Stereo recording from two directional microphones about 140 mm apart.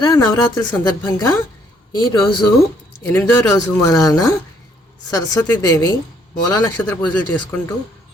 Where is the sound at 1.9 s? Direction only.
30° left (ahead or behind); by 7.6 s 10° left (ahead or behind).